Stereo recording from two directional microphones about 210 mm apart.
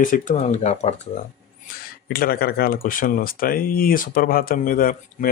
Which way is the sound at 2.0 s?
45° left (ahead or behind).